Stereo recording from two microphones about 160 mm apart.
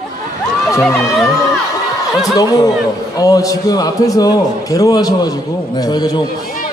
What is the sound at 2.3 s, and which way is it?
A man's voice, 25° left (ahead or behind).